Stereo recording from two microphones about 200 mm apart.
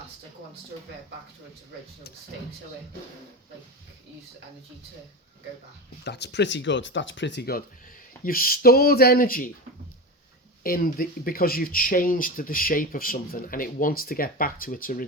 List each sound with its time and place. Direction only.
6.1 s speech: 55° left (ahead or behind)
10.6 s speech: 45° left (ahead or behind)